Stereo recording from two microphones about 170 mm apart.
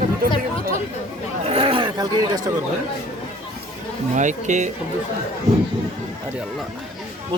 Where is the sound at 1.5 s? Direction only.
30° right (ahead or behind).